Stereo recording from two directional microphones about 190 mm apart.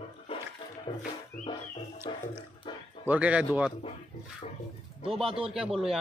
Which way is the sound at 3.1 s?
5° right (ahead or behind).